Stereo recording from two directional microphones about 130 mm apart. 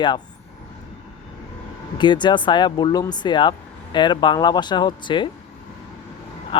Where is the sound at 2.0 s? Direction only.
35° left (ahead or behind).